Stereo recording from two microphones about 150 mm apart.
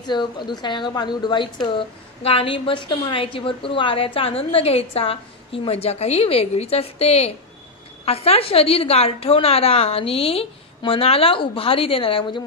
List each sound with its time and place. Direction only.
0.0 s a woman's voice: 30° left (ahead or behind)